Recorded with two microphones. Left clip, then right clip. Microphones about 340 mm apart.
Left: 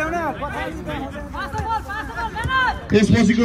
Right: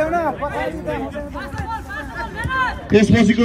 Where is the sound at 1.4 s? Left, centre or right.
Centre.